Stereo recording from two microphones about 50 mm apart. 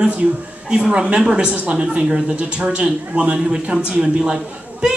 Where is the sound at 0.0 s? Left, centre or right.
Right.